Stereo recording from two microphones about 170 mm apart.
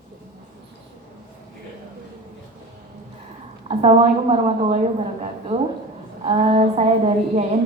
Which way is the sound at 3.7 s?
40° right (ahead or behind).